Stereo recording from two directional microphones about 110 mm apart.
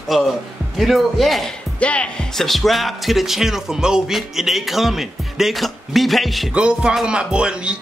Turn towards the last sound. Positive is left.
turn(degrees=-10)  # may be behind; listen again after turning